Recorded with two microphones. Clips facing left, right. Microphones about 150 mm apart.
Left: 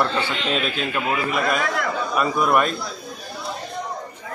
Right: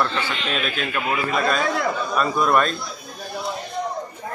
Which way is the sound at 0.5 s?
25° left (ahead or behind).